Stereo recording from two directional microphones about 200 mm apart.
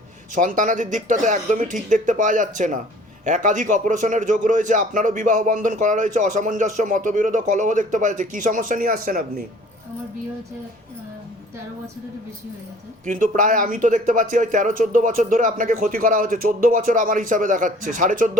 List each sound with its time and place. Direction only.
0.3 s a man's voice: 40° right (ahead or behind)
13.1 s a man's voice: 40° right (ahead or behind)